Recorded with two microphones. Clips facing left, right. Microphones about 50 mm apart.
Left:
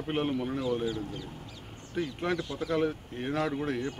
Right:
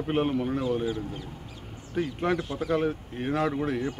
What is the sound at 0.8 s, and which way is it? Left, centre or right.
Speech, right.